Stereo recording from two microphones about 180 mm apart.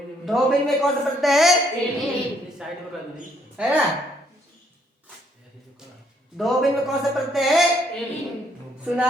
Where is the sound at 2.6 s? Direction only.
5° right (ahead or behind).